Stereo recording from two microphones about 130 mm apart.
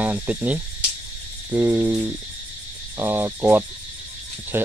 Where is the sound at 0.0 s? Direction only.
10° right (ahead or behind).